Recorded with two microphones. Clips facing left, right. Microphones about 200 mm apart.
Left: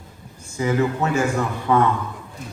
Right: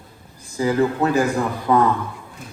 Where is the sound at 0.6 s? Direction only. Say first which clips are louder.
Right 2 dB; 35° right (ahead or behind).